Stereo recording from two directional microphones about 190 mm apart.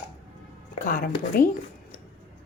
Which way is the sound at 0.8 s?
50° left (ahead or behind).